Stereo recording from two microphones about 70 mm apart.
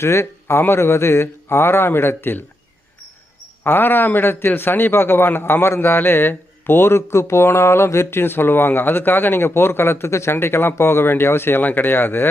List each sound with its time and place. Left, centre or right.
0.0 s a man's voice: left
3.6 s a man's voice: left